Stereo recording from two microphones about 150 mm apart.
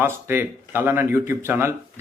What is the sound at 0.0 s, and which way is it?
A man's voice, 15° right (ahead or behind).